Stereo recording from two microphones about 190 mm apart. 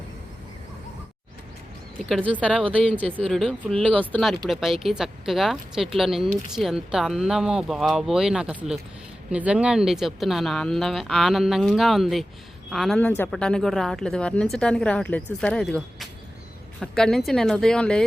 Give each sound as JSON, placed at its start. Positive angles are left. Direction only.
{"t": 2.3, "sound": "speech", "side_deg": 5}